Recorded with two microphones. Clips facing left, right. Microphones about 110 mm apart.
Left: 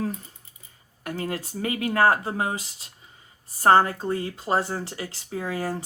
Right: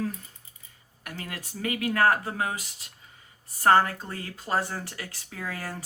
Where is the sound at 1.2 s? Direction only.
30° left (ahead or behind).